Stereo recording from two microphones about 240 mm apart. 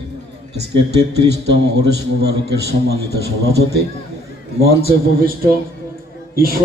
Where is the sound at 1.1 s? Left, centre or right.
Right.